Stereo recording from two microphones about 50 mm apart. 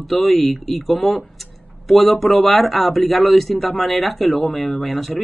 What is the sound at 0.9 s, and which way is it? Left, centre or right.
Speech, left.